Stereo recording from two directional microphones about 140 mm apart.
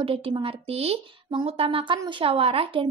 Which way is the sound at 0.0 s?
45° right (ahead or behind).